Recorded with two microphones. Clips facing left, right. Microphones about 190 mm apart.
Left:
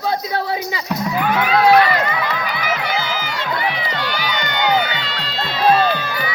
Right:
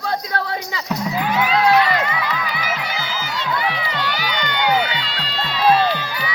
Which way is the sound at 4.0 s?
50° left (ahead or behind).